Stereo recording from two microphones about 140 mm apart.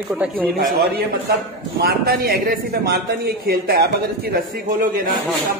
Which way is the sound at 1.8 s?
90° right.